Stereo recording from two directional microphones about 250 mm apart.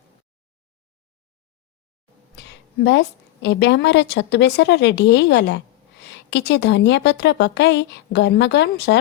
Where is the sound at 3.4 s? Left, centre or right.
Left.